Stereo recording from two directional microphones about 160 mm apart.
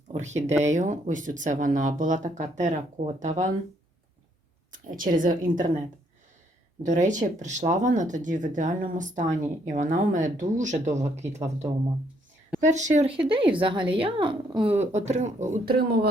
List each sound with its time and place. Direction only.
0.1 s speech: 45° right (ahead or behind)
4.7 s a woman's voice: 60° right (ahead or behind)
6.8 s speech: 50° right (ahead or behind)
13.1 s speech: 35° right (ahead or behind)